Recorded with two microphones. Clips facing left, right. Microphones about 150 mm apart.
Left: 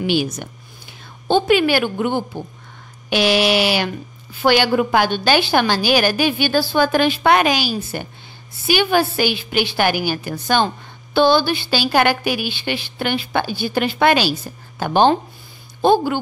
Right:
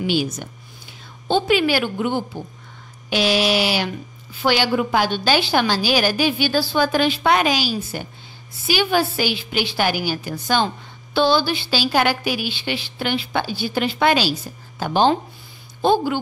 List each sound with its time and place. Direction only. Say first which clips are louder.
0.0 s speech: left 2 dB; 65° left (ahead or behind)